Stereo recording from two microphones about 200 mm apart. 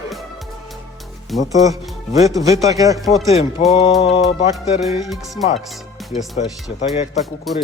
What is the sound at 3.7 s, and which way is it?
Speech, 30° left (ahead or behind).